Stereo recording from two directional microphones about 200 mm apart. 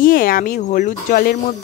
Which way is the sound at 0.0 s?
45° left (ahead or behind).